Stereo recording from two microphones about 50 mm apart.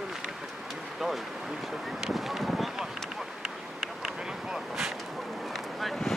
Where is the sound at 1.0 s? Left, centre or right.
Centre.